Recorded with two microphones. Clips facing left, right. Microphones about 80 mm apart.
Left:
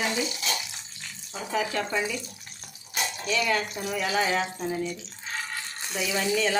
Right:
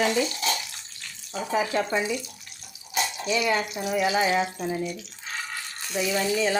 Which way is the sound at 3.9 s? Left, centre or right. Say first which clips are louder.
Right 3 dB; centre.